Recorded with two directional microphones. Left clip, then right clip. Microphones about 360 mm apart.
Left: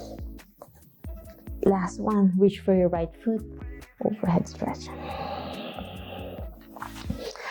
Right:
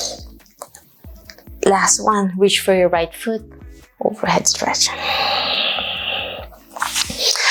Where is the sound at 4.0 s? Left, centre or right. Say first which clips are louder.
Right 9 dB; centre.